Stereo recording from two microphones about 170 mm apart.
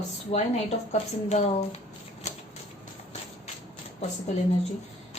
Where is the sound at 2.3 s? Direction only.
45° left (ahead or behind).